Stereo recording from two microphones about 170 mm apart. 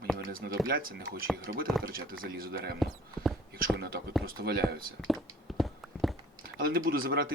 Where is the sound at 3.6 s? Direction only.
60° right (ahead or behind).